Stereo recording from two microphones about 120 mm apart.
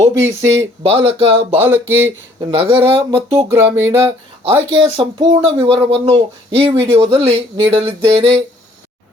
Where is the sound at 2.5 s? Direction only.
50° right (ahead or behind).